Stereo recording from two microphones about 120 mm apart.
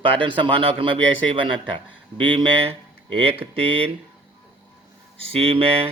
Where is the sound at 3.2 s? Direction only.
55° right (ahead or behind).